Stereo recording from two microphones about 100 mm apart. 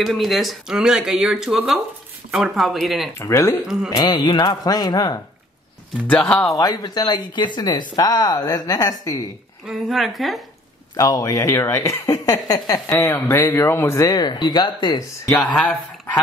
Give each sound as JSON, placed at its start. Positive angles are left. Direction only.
{"t": 0.0, "sound": "speech", "side_deg": 0}
{"t": 3.2, "sound": "speech", "side_deg": 30}
{"t": 3.9, "sound": "speech", "side_deg": 45}
{"t": 6.0, "sound": "speech", "side_deg": 15}
{"t": 6.5, "sound": "speech", "side_deg": 35}
{"t": 9.7, "sound": "speech", "side_deg": 0}
{"t": 11.0, "sound": "speech", "side_deg": 35}
{"t": 13.0, "sound": "speech", "side_deg": 20}
{"t": 14.1, "sound": "speech", "side_deg": 45}
{"t": 15.5, "sound": "speech", "side_deg": 10}